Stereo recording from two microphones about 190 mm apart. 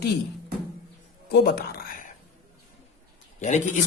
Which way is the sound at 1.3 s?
55° left (ahead or behind).